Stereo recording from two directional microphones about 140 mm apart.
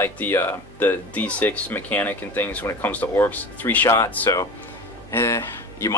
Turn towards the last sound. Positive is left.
turn(degrees=20)  # may be behind; listen again after turning